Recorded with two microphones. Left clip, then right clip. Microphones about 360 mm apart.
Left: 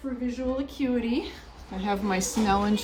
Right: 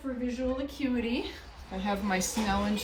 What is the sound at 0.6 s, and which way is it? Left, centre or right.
Speech, centre.